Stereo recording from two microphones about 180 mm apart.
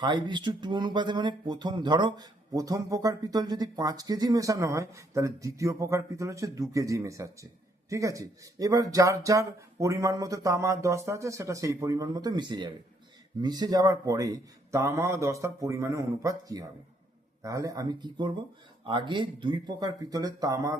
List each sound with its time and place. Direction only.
0.0 s speech: 25° right (ahead or behind)